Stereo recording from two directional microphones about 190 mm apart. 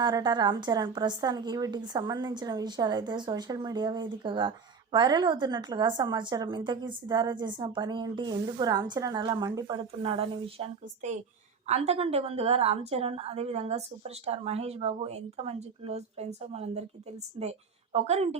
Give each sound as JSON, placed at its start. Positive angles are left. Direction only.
{"t": 0.0, "sound": "a woman's voice", "side_deg": -20}